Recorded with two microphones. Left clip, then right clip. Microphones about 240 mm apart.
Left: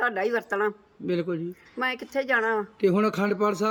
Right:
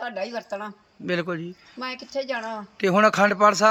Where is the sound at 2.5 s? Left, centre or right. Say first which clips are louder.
Right 2 dB; centre.